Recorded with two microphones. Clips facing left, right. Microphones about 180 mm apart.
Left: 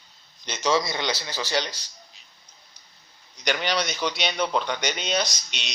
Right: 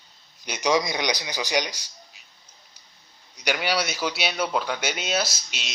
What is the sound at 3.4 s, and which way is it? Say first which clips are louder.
Speech: even; 10° right (ahead or behind).